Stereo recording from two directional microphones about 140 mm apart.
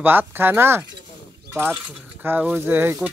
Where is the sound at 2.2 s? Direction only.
15° right (ahead or behind).